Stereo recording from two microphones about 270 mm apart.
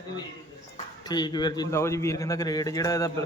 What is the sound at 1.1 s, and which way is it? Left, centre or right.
A man's voice, centre.